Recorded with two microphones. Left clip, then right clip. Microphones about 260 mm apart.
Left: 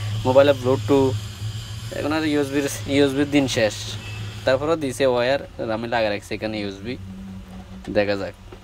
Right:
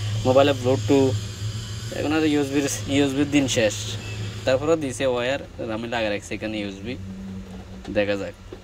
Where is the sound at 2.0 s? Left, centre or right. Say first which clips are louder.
Even; centre.